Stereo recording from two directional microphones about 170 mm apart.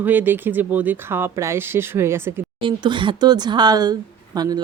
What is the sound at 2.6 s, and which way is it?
Speech, 30° right (ahead or behind).